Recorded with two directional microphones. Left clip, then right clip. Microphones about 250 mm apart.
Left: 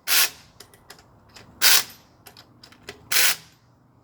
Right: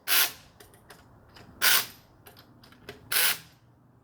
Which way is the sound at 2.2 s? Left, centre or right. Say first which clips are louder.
Left 5 dB; centre.